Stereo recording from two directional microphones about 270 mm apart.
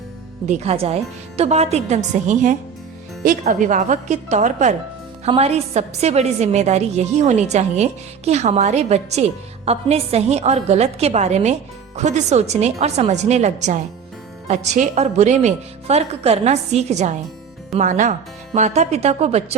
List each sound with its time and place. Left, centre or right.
0.4 s a woman's voice: right